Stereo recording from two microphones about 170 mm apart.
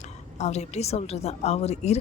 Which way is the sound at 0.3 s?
40° left (ahead or behind).